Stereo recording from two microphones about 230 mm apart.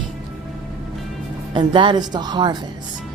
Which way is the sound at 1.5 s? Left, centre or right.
Right.